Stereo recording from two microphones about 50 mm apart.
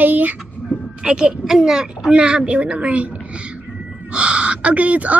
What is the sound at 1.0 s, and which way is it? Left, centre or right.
Speech, centre.